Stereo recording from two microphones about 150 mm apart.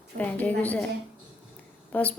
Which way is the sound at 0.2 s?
10° left (ahead or behind).